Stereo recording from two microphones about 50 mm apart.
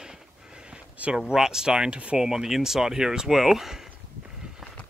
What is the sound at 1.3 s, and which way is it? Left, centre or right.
Speech, centre.